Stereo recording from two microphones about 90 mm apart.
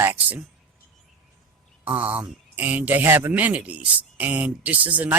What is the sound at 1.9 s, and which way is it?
Speech, 15° right (ahead or behind).